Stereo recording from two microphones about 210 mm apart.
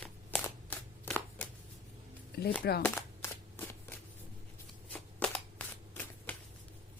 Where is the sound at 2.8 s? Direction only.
10° left (ahead or behind).